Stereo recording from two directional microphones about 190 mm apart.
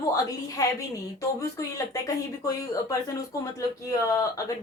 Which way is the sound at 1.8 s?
20° left (ahead or behind).